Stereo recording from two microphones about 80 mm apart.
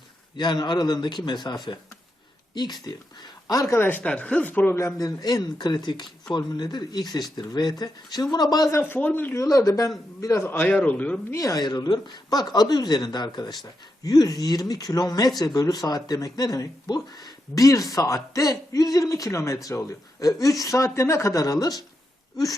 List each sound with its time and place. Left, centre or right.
0.3 s speech: left
3.8 s speech: left
4.9 s speech: left
8.8 s speech: left
9.3 s speech: left
10.5 s speech: left
11.3 s speech: left
14.0 s speech: left